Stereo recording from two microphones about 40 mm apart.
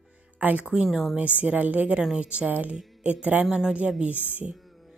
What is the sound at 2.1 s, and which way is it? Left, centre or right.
Speech, right.